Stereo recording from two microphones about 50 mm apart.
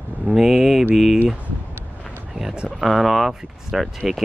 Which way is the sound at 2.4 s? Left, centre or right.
Right.